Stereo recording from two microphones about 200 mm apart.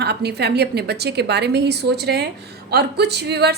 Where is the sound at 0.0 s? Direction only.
55° right (ahead or behind).